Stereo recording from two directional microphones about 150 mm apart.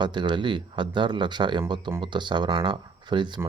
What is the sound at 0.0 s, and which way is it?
Speech, 30° right (ahead or behind).